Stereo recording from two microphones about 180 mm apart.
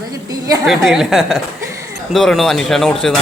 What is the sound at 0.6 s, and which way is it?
Speech, centre (ahead or behind).